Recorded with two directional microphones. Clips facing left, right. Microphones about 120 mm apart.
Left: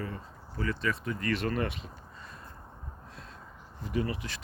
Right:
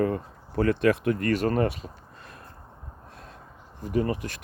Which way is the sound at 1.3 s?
40° right (ahead or behind).